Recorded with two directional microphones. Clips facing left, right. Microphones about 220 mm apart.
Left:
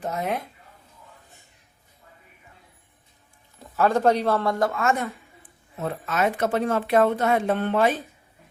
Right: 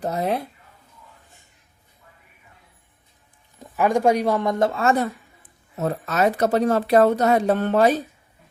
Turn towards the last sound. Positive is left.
turn(degrees=-40)  # may be behind; listen again after turning